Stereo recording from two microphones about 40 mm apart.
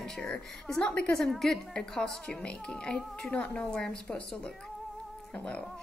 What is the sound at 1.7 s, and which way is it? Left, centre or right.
A child's voice, centre.